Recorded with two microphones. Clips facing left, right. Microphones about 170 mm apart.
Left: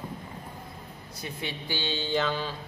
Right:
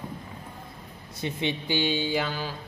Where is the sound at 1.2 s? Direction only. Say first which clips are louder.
Right 7 dB; 20° right (ahead or behind).